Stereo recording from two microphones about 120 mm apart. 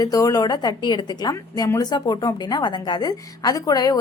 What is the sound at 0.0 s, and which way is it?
A woman's voice, 30° left (ahead or behind).